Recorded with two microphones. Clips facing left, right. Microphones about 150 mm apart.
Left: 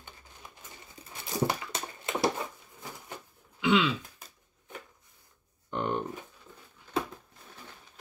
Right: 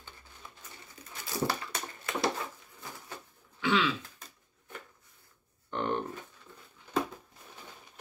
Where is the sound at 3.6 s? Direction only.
15° left (ahead or behind).